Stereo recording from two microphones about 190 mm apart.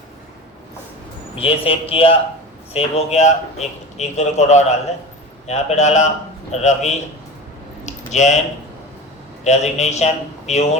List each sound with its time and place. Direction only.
1.4 s a man's voice: 30° left (ahead or behind)
7.9 s a sound: 40° left (ahead or behind)
9.4 s a man's voice: 35° left (ahead or behind)